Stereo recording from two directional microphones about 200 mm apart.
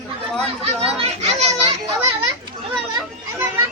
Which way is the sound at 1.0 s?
30° right (ahead or behind).